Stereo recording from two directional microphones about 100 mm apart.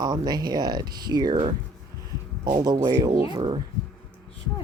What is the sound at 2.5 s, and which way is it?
Speech, 45° right (ahead or behind).